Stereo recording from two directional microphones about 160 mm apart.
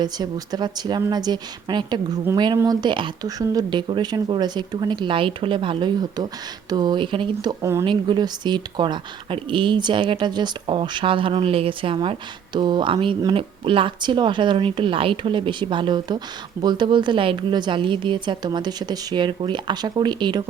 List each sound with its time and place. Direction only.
0.0 s speech: 25° right (ahead or behind)
7.6 s speech: 15° right (ahead or behind)
7.9 s speech: 30° right (ahead or behind)